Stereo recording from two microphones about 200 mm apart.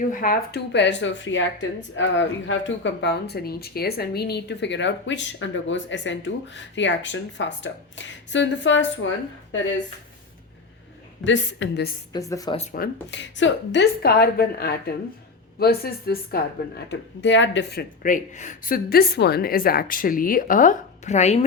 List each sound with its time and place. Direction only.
0.1 s speech: 45° left (ahead or behind); by 9.8 s 70° left (ahead or behind)
11.2 s speech: 65° left (ahead or behind)
12.1 s speech: 15° left (ahead or behind)
12.7 s speech: 55° left (ahead or behind); by 21.4 s 35° left (ahead or behind)